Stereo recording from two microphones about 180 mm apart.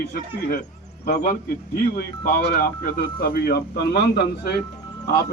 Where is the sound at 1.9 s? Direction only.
55° left (ahead or behind).